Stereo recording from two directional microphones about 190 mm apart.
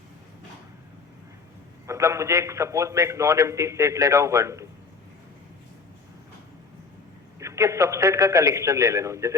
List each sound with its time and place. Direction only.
1.9 s a man's voice: 15° right (ahead or behind)
7.3 s a man's voice: 15° right (ahead or behind)